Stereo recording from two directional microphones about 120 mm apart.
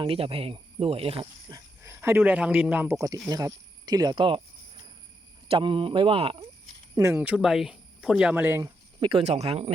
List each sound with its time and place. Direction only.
0.0 s speech: 50° right (ahead or behind)
1.2 s speech: 35° right (ahead or behind)
1.8 s a man's voice: 20° right (ahead or behind)
3.2 s speech: 30° right (ahead or behind)
5.5 s speech: 45° right (ahead or behind)
7.1 s speech: 10° right (ahead or behind)
8.6 s a sound: 40° right (ahead or behind)
9.2 s speech: 60° right (ahead or behind)